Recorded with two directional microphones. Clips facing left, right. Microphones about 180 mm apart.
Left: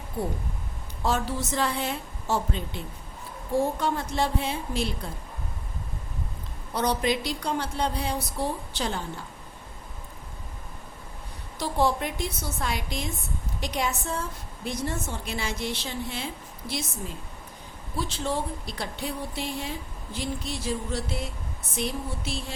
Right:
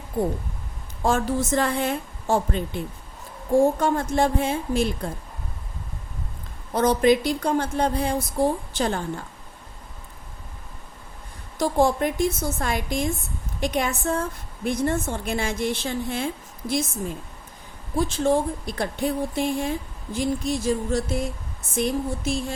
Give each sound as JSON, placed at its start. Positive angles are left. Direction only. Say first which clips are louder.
{"t": 1.0, "sound": "a woman's voice", "louder": "right 5 dB", "side_deg": -50}
{"t": 6.7, "sound": "a woman's voice", "louder": "right 7 dB", "side_deg": -50}
{"t": 11.6, "sound": "a woman's voice", "louder": "right 5 dB", "side_deg": -45}
{"t": 17.9, "sound": "a woman's voice", "louder": "right 8 dB", "side_deg": -50}